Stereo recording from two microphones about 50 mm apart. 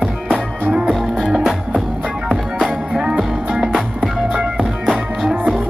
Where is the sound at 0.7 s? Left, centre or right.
Centre.